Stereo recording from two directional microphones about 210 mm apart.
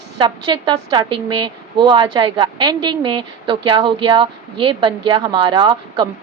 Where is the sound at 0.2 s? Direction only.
20° right (ahead or behind).